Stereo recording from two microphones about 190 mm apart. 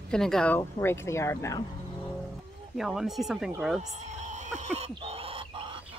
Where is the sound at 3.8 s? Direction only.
40° right (ahead or behind).